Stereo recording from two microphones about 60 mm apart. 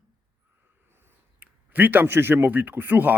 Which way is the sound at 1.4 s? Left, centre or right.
Right.